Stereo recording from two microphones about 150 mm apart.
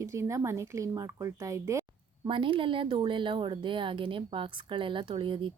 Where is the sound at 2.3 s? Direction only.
35° right (ahead or behind).